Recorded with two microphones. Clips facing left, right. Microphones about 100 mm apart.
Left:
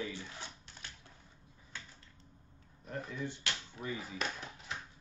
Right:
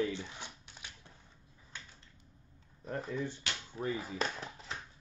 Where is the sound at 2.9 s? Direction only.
35° right (ahead or behind).